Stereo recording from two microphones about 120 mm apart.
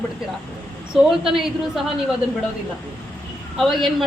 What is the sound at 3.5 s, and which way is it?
Speech, centre (ahead or behind).